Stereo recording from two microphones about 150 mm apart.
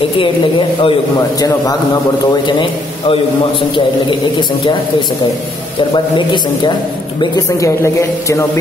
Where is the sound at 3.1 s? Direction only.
35° left (ahead or behind).